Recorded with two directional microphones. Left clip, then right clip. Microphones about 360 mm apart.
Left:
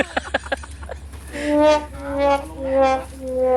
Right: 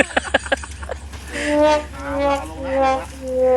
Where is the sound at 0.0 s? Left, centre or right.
Centre.